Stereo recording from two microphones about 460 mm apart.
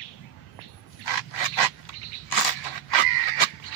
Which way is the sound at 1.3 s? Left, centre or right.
Left.